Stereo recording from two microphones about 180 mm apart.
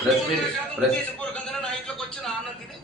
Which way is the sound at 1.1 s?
5° left (ahead or behind).